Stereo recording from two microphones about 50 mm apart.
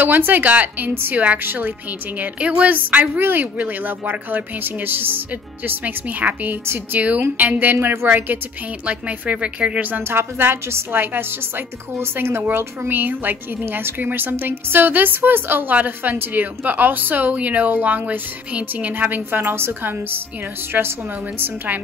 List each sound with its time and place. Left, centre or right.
0.0 s speech: right
1.4 s a woman's voice: right
2.1 s speech: right
7.5 s a woman's voice: right
8.8 s a woman's voice: right
10.0 s a woman's voice: right
12.5 s a woman's voice: right
15.7 s speech: right